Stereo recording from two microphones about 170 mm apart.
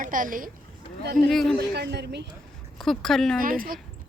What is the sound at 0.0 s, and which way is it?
Speech, 50° right (ahead or behind).